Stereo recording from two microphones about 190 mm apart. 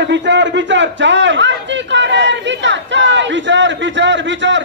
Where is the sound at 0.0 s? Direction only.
65° right (ahead or behind).